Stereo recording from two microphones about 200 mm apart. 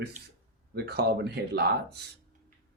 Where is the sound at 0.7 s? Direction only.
55° right (ahead or behind).